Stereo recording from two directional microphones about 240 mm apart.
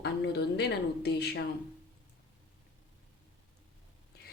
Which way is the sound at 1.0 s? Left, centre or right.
Left.